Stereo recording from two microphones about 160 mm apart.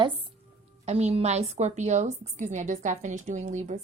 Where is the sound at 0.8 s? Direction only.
40° right (ahead or behind).